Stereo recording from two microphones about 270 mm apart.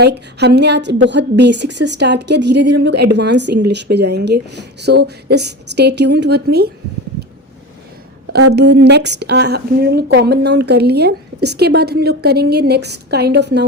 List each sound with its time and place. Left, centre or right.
0.0 s a woman's voice: right
8.5 s a woman's voice: right